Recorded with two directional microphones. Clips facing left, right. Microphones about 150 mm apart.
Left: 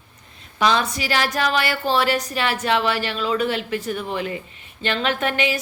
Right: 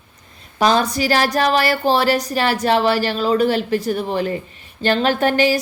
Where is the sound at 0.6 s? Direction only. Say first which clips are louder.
Right 4 dB; 40° right (ahead or behind).